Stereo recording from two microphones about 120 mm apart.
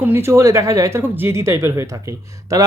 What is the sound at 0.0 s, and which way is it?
Speech, 20° right (ahead or behind).